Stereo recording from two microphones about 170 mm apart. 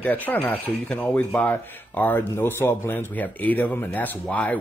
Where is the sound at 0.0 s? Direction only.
10° left (ahead or behind).